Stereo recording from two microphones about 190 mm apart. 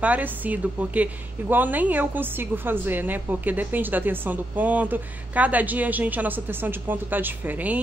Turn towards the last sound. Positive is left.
turn(degrees=-10)  # may be behind; listen again after turning